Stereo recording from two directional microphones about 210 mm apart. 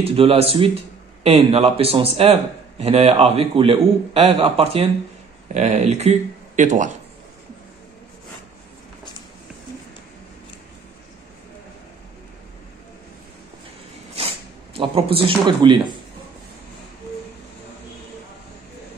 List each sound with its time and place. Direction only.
0.0 s a man's voice: 25° right (ahead or behind)
14.1 s zipper: 25° right (ahead or behind)